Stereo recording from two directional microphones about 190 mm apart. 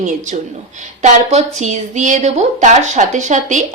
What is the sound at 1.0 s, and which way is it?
A woman's voice, 35° right (ahead or behind).